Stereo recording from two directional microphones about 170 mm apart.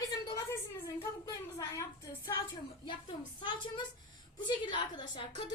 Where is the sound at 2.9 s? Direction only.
25° left (ahead or behind).